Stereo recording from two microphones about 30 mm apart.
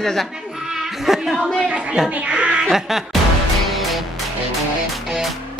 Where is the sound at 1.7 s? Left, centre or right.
Right.